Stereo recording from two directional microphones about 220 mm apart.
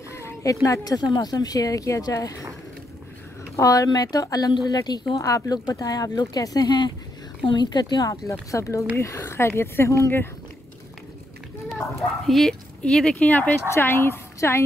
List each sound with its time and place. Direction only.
0.1 s speech: 15° left (ahead or behind)
3.5 s a woman's voice: 15° left (ahead or behind)
12.3 s a woman's voice: centre (ahead or behind)